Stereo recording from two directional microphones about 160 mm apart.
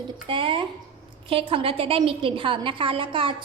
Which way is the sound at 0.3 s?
35° right (ahead or behind).